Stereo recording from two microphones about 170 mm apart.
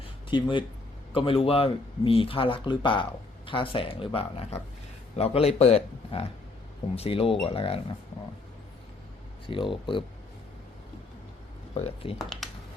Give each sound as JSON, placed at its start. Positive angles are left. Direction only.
{"t": 0.0, "sound": "a sound", "side_deg": 30}
{"t": 1.1, "sound": "speech", "side_deg": 30}
{"t": 9.5, "sound": "speech", "side_deg": 30}
{"t": 11.7, "sound": "speech", "side_deg": 35}
{"t": 12.2, "sound": "computer keyboard", "side_deg": 0}